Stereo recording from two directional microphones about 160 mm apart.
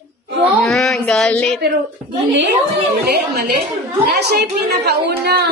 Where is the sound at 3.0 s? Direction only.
90° right.